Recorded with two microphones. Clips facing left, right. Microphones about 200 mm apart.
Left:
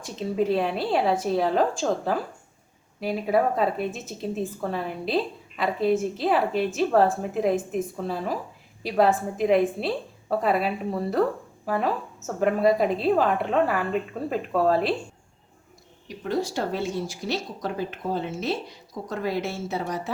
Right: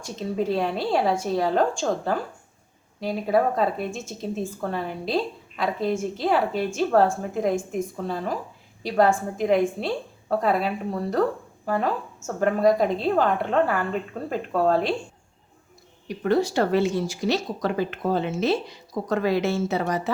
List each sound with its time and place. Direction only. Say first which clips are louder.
0.0 s speech: left 1 dB; centre (ahead or behind)
16.0 s speech: right 5 dB; 65° right (ahead or behind); by 20.0 s 85° right